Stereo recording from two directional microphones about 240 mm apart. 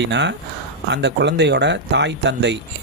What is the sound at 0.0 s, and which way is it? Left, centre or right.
Speech, right.